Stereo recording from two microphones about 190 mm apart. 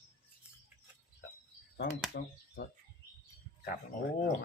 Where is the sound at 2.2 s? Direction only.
55° left (ahead or behind).